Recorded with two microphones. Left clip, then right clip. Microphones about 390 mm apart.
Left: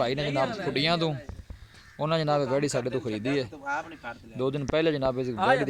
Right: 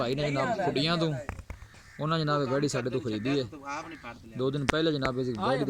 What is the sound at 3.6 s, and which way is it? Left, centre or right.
Speech, left.